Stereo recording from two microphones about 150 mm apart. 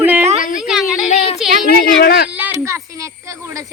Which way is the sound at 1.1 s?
45° left (ahead or behind).